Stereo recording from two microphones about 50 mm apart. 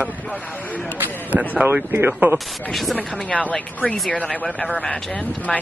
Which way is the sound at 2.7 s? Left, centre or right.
Centre.